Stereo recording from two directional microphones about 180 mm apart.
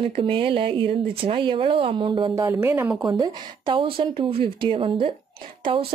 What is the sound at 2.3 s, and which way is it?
Speech, 15° right (ahead or behind).